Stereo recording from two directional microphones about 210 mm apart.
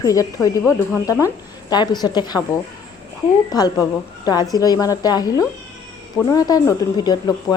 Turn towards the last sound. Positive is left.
turn(degrees=20)  # may be behind; listen again after turning